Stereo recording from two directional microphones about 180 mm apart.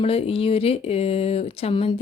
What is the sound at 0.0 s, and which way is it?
Speech, 35° left (ahead or behind).